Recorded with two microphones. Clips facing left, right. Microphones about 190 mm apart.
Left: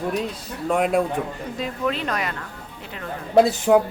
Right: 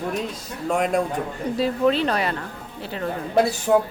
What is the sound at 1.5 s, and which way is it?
Speech, 35° right (ahead or behind).